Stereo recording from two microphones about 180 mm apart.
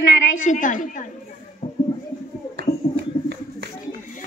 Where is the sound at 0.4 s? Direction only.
45° left (ahead or behind).